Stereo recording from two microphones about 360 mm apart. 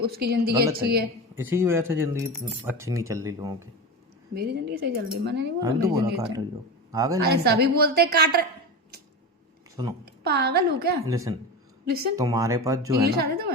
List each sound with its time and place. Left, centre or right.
0.0 s a woman's voice: right
1.4 s speech: centre
4.4 s a woman's voice: right
5.5 s speech: centre
7.2 s a woman's voice: right
10.1 s a woman's voice: right
11.0 s speech: centre
11.9 s a woman's voice: right
12.1 s speech: centre
13.1 s a woman's voice: right